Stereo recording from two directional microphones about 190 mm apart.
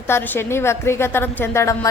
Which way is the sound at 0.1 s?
10° left (ahead or behind).